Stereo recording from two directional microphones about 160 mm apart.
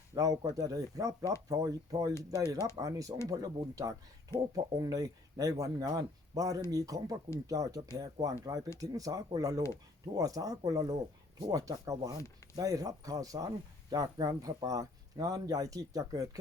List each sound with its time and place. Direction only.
0.1 s speech: 20° right (ahead or behind)